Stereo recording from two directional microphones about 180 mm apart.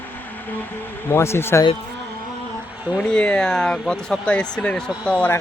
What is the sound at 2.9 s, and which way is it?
Speech, 5° left (ahead or behind).